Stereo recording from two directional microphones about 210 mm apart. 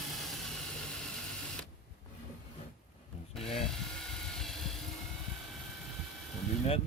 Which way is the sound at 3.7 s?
Centre (ahead or behind).